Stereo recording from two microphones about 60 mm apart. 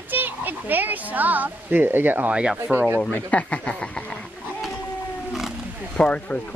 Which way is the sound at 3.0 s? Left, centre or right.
Left.